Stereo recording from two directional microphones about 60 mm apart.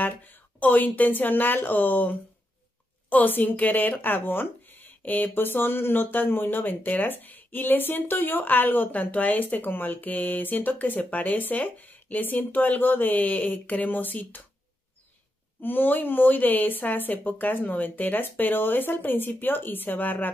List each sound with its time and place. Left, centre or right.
0.0 s speech: left
15.6 s speech: left